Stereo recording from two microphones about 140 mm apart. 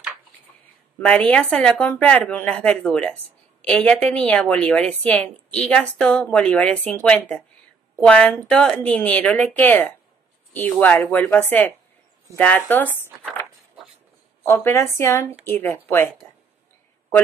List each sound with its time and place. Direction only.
0.9 s speech: 10° left (ahead or behind)
14.4 s a woman's voice: 15° left (ahead or behind)